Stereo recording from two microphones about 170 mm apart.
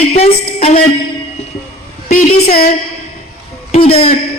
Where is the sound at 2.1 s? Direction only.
55° left (ahead or behind).